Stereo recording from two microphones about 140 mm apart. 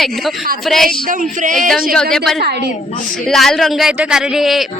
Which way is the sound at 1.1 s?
70° right (ahead or behind).